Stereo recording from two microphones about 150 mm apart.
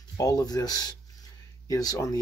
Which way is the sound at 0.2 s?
25° left (ahead or behind).